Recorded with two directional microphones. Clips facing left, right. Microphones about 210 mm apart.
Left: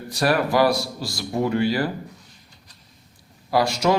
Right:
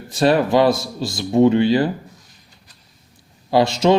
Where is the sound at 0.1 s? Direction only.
25° right (ahead or behind).